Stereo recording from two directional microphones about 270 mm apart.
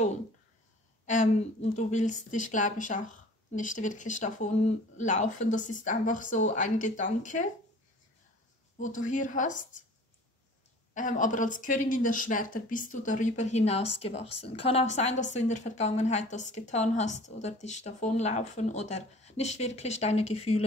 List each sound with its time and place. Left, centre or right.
1.0 s a woman's voice: left
8.7 s a woman's voice: left
11.0 s a woman's voice: left